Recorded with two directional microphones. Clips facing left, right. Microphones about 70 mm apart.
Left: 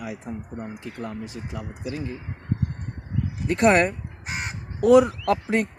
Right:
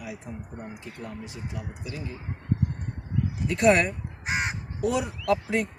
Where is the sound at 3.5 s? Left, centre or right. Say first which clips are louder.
Left 3 dB; left.